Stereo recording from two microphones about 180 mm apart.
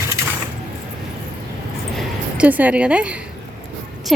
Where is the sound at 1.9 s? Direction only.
5° right (ahead or behind).